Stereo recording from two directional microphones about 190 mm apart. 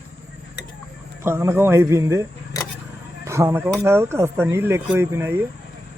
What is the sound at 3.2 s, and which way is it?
Speech, 15° right (ahead or behind).